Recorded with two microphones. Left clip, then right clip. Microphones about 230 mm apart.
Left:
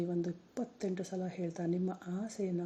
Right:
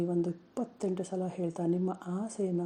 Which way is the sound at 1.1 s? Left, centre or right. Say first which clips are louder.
Right 5 dB; right.